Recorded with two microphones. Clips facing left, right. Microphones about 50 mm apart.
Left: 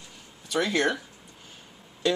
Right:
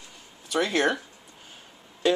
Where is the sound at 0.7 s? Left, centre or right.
Centre.